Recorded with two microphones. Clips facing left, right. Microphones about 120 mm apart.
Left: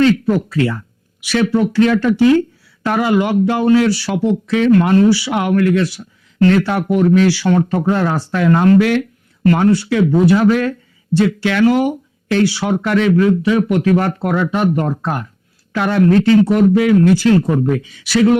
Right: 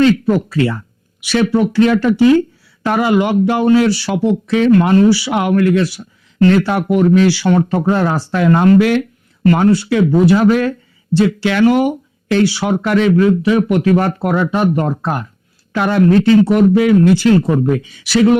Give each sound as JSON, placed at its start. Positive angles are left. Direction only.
{"t": 0.0, "sound": "speech", "side_deg": -25}